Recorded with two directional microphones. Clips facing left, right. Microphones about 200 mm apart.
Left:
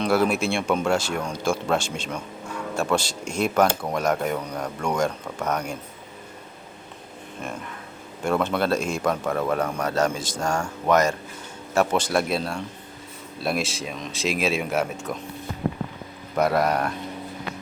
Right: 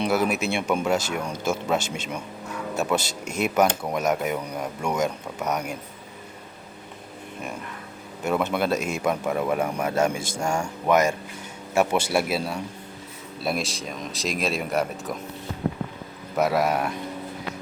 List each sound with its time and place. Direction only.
0.0 s speech: 5° right (ahead or behind)
3.2 s speech: 5° right (ahead or behind)
8.2 s speech: 5° right (ahead or behind)
10.4 s speech: 25° right (ahead or behind)
10.8 s speech: 10° right (ahead or behind)
16.3 s speech: 5° right (ahead or behind)